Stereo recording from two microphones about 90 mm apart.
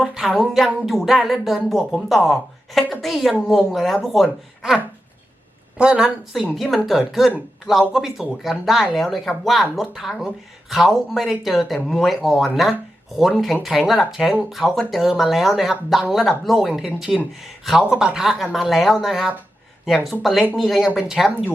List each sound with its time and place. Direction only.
0.0 s a woman's voice: 5° right (ahead or behind)
6.5 s speech: centre (ahead or behind)